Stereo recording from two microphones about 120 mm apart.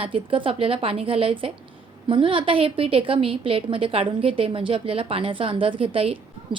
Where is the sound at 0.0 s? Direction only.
45° right (ahead or behind).